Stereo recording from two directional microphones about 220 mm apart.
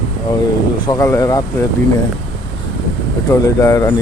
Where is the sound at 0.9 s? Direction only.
15° left (ahead or behind).